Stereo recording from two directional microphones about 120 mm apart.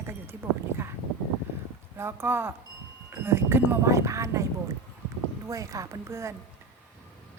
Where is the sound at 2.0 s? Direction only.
20° right (ahead or behind).